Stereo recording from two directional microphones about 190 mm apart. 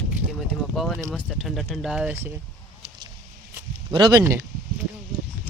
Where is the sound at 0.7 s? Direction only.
Centre (ahead or behind).